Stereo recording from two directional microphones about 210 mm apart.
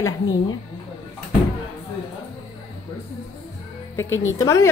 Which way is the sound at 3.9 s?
10° left (ahead or behind).